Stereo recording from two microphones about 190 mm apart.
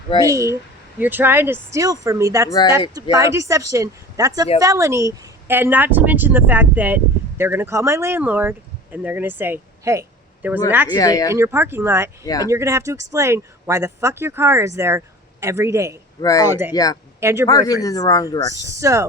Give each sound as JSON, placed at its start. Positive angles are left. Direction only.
{"t": 0.3, "sound": "speech", "side_deg": -15}
{"t": 2.5, "sound": "speech", "side_deg": 20}
{"t": 2.9, "sound": "a woman's voice", "side_deg": -15}
{"t": 10.9, "sound": "speech", "side_deg": 20}
{"t": 11.3, "sound": "speech", "side_deg": -15}
{"t": 12.2, "sound": "speech", "side_deg": 20}
{"t": 12.5, "sound": "speech", "side_deg": -15}
{"t": 16.2, "sound": "speech", "side_deg": 20}
{"t": 16.5, "sound": "speech", "side_deg": -10}
{"t": 16.7, "sound": "speech", "side_deg": 20}
{"t": 17.2, "sound": "speech", "side_deg": -15}
{"t": 17.4, "sound": "speech", "side_deg": 20}
{"t": 18.7, "sound": "speech", "side_deg": -15}